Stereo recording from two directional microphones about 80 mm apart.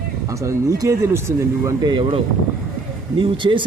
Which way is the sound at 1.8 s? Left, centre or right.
Right.